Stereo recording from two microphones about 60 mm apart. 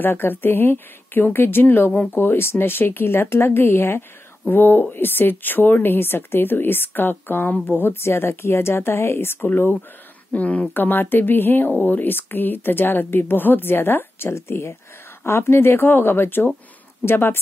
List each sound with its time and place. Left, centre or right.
0.0 s a woman's voice: left
9.4 s a woman's voice: left